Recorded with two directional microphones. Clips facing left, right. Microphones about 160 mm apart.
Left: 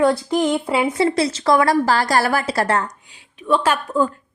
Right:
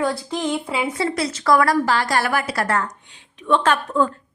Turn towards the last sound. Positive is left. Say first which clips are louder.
# even
turn(degrees=10)  # may be behind; listen again after turning